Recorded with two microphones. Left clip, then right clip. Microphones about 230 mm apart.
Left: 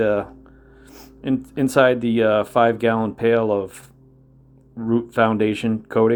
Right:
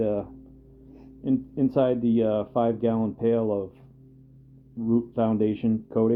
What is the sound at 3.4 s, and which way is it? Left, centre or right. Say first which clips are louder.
Speech: left 6 dB; left.